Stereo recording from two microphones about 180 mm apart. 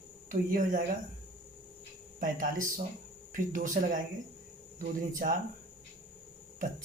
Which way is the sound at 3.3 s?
45° right (ahead or behind).